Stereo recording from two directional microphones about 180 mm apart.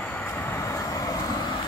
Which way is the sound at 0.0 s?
10° left (ahead or behind).